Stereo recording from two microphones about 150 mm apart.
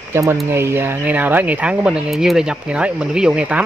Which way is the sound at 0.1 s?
15° right (ahead or behind).